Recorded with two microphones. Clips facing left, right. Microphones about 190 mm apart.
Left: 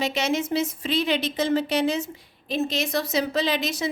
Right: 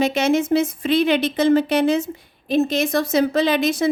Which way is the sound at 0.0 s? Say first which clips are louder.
Right 7 dB; 50° right (ahead or behind).